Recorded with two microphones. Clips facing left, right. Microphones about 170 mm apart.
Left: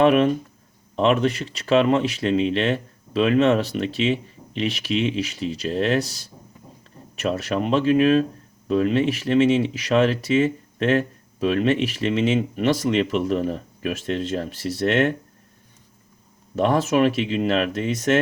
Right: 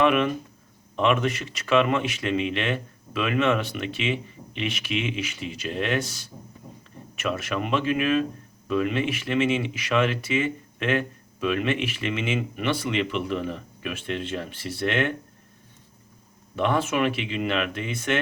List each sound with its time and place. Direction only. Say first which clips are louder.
0.0 s speech: left 5 dB; 35° left (ahead or behind)
16.6 s speech: left 5 dB; 40° left (ahead or behind)